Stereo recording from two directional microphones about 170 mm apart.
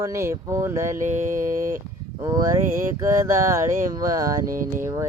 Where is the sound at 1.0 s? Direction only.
45° right (ahead or behind).